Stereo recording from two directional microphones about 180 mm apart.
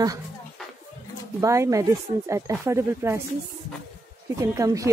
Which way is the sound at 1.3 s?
15° right (ahead or behind).